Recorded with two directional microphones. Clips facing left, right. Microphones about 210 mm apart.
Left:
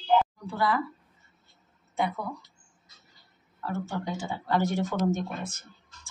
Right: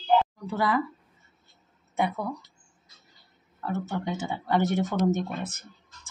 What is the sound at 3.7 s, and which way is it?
Speech, 20° right (ahead or behind).